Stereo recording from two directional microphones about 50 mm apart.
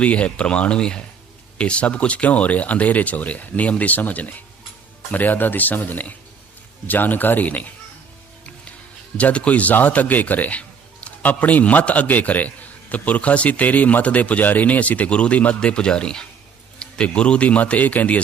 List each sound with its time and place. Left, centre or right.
0.0 s a man's voice: left
9.1 s a man's voice: left